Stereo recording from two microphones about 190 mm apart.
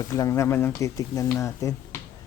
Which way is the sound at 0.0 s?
15° left (ahead or behind).